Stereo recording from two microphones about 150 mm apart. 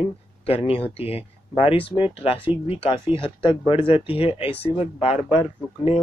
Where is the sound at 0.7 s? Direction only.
40° left (ahead or behind).